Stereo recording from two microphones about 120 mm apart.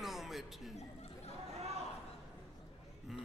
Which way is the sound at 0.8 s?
60° left (ahead or behind).